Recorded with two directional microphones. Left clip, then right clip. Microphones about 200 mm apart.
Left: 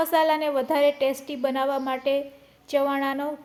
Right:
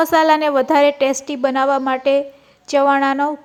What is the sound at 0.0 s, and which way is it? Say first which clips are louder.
A woman's voice: right 8 dB; 30° right (ahead or behind).